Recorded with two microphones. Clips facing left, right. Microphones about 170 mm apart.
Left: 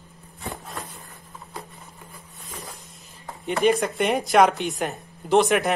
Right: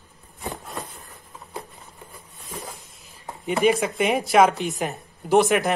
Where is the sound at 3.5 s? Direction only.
5° right (ahead or behind).